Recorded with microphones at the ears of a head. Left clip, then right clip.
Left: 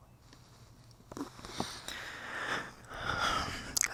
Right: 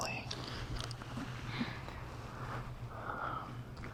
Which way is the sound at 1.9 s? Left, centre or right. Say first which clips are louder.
Left 7 dB; left.